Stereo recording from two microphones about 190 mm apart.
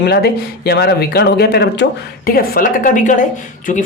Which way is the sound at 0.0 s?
60° left (ahead or behind).